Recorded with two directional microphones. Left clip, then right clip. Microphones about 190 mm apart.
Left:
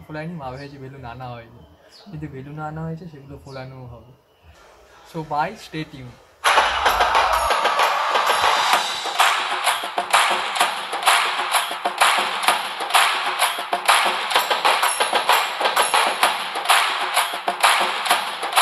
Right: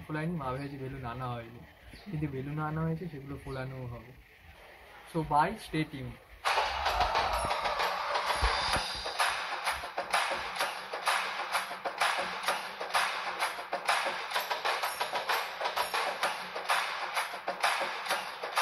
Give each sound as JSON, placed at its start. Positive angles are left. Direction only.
{"t": 0.1, "sound": "speech", "side_deg": -15}
{"t": 5.1, "sound": "speech", "side_deg": -15}
{"t": 6.4, "sound": "music", "side_deg": 45}